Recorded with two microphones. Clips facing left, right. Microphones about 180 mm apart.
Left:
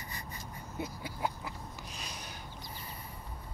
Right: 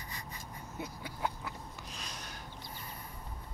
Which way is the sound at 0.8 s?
5° left (ahead or behind).